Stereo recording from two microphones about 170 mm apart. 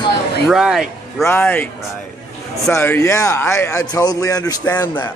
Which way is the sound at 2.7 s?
15° left (ahead or behind).